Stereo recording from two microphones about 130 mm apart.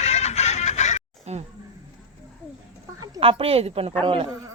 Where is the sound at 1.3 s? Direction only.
55° right (ahead or behind).